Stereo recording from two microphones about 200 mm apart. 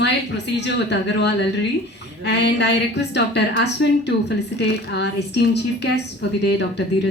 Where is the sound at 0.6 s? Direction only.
60° left (ahead or behind).